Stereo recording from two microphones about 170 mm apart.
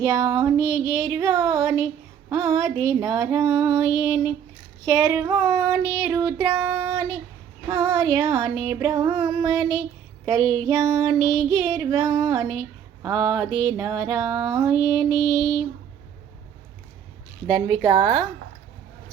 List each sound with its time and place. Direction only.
0.0 s child singing: 20° right (ahead or behind)
3.9 s mantra: 5° right (ahead or behind)
4.9 s child singing: 15° right (ahead or behind)
14.8 s mantra: 5° right (ahead or behind)
17.4 s child singing: 20° right (ahead or behind)